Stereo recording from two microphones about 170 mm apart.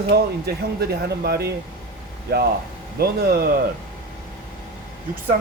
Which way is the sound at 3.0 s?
65° right (ahead or behind).